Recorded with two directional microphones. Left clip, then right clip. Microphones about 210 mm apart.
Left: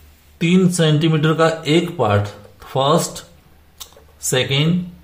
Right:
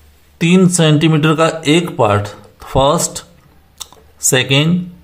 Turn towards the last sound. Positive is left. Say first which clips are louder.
# right 5 dB
turn(degrees=-35)  # may be behind; listen again after turning